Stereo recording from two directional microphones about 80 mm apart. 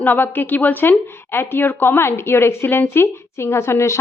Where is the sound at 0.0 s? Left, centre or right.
Left.